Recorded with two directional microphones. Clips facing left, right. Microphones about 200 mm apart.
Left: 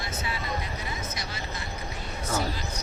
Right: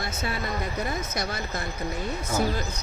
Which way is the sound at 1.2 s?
60° right (ahead or behind).